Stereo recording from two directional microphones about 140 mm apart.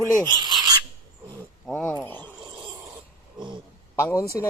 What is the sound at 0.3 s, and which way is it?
Filing, 30° right (ahead or behind).